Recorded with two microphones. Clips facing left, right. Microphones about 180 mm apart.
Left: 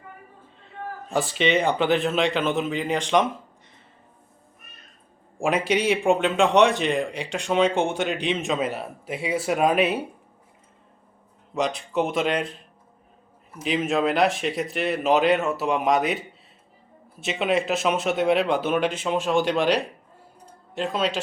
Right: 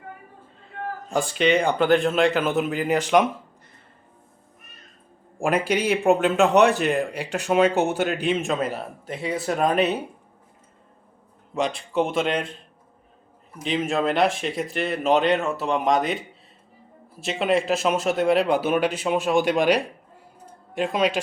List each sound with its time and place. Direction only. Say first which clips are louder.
1.1 s a man's voice: right 1 dB; centre (ahead or behind)
5.4 s a man's voice: even; centre (ahead or behind)
11.5 s a man's voice: right 1 dB; centre (ahead or behind)
13.6 s a man's voice: left 1 dB; 5° left (ahead or behind)
17.2 s a man's voice: right 1 dB; centre (ahead or behind)